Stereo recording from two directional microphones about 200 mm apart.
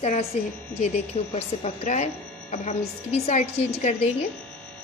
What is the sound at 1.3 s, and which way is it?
A woman's voice, 35° left (ahead or behind).